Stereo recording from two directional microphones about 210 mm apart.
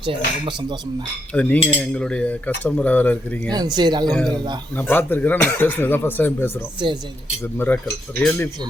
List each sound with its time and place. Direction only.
0.0 s speech: 25° right (ahead or behind)
1.3 s speech: 5° left (ahead or behind)
3.5 s speech: 20° right (ahead or behind)
4.1 s a man's voice: centre (ahead or behind)
7.7 s speech: 10° left (ahead or behind)